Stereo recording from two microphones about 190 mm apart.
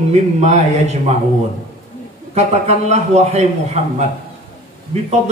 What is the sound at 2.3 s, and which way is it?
A man's voice, 35° right (ahead or behind).